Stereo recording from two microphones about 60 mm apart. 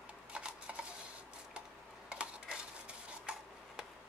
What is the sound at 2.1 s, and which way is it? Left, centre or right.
Dishes, centre.